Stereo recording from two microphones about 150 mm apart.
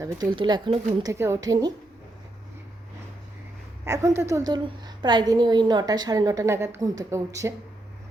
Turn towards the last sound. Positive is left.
turn(degrees=-20)  # may be behind; listen again after turning